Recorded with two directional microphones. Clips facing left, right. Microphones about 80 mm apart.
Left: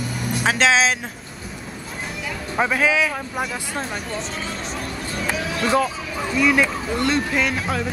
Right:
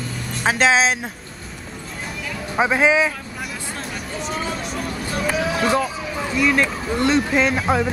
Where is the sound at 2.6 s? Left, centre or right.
Centre.